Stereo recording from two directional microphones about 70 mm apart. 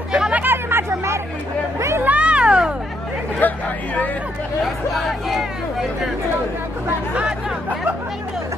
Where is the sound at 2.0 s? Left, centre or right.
Centre.